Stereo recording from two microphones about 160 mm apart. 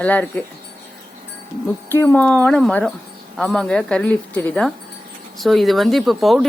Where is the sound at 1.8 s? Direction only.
15° left (ahead or behind).